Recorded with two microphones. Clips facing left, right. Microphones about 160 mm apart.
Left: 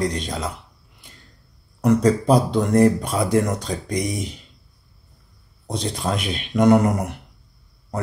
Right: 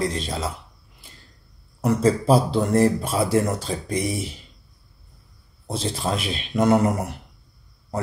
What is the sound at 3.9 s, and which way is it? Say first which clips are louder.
Speech: even; 5° right (ahead or behind).